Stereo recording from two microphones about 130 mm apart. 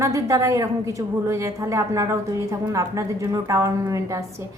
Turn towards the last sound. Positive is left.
turn(degrees=-25)  # may be behind; listen again after turning